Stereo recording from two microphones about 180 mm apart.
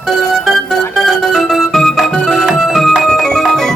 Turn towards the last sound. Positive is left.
turn(degrees=0)  # may be behind; listen again after turning